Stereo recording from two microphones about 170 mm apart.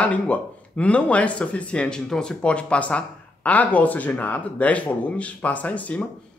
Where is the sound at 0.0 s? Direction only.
10° left (ahead or behind).